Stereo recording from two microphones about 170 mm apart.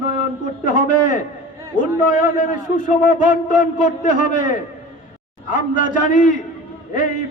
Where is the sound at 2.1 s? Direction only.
50° left (ahead or behind).